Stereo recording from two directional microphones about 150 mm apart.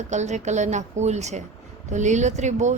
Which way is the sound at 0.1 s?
50° right (ahead or behind).